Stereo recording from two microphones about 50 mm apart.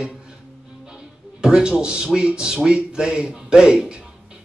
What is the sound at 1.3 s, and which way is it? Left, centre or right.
Speech, centre.